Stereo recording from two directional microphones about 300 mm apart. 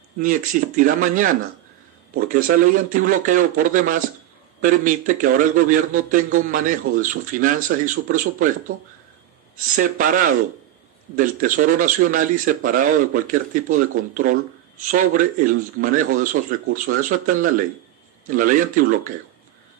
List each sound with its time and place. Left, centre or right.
0.2 s speech: right
9.8 s speech: right